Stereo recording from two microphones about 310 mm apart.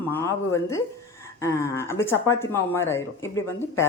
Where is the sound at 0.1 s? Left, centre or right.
Centre.